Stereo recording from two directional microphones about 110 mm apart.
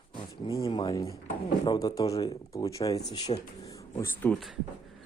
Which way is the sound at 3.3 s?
65° left (ahead or behind).